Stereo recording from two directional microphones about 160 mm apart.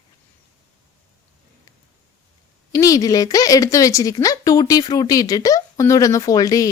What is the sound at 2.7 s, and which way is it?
A woman's voice, 20° left (ahead or behind).